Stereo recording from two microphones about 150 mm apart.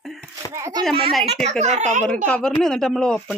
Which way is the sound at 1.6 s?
50° right (ahead or behind).